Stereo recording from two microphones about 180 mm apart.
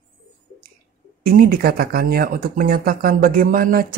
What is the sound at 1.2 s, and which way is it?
Speech, 50° right (ahead or behind).